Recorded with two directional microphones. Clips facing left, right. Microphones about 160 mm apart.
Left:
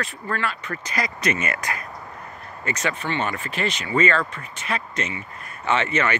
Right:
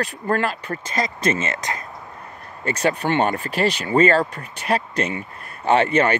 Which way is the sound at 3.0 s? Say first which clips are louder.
Right 7 dB; 50° right (ahead or behind).